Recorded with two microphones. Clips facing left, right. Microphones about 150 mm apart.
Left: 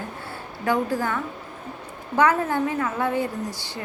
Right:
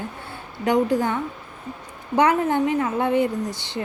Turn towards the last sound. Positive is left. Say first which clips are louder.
# right 4 dB
turn(degrees=-20)  # may be behind; listen again after turning